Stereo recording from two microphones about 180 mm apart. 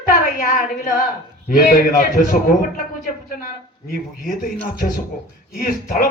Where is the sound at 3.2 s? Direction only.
50° left (ahead or behind).